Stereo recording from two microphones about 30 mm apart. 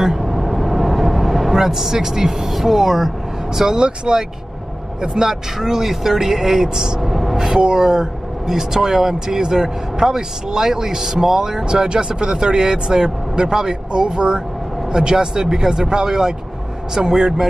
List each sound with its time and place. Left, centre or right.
0.0 s vehicle: centre
1.5 s speech: centre
3.7 s speech: right
5.3 s speech: centre
7.0 s vehicle: centre
7.3 s speech: right
11.6 s speech: right